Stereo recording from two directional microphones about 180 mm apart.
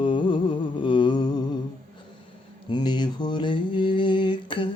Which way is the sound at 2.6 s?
25° left (ahead or behind).